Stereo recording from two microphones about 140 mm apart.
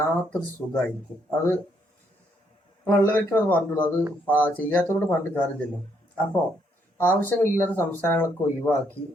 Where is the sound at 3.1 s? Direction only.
15° left (ahead or behind).